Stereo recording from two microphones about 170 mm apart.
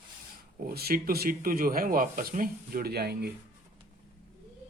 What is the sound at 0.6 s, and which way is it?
Speech, 65° right (ahead or behind).